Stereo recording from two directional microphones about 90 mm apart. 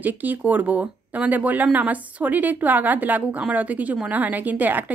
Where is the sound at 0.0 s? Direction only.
20° right (ahead or behind).